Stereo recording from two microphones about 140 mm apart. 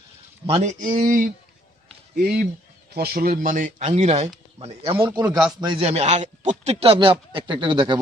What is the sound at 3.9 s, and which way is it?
Speech, 50° right (ahead or behind).